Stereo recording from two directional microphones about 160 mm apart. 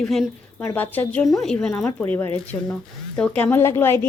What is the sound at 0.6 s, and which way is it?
Speech, 15° left (ahead or behind).